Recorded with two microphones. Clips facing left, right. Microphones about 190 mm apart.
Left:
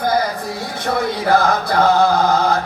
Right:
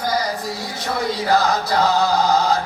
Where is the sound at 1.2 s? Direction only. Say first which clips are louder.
Left 3 dB; 55° left (ahead or behind).